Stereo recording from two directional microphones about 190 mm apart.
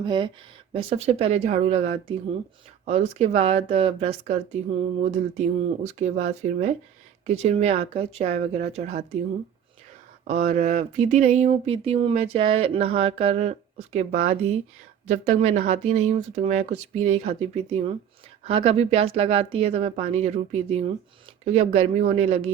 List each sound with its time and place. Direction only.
0.0 s speech: 25° right (ahead or behind)
10.2 s speech: 35° right (ahead or behind)